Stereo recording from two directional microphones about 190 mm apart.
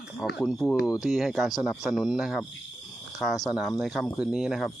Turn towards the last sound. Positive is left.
turn(degrees=0)  # may be behind; listen again after turning